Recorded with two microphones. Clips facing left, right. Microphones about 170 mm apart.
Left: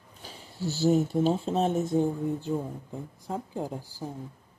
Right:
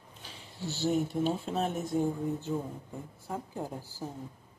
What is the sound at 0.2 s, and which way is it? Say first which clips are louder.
A woman's voice: left 6 dB; 40° left (ahead or behind).